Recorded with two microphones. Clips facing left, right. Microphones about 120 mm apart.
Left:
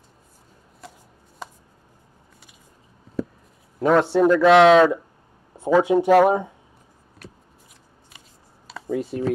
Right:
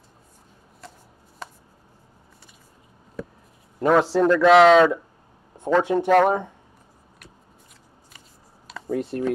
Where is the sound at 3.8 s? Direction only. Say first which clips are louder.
Left 1 dB; centre (ahead or behind).